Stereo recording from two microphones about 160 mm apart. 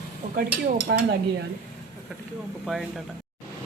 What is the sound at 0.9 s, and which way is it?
Speech, 90° right.